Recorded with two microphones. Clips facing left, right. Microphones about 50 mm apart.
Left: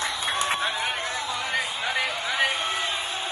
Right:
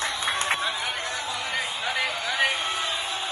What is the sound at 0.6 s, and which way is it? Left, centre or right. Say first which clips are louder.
Run: left 1 dB; left.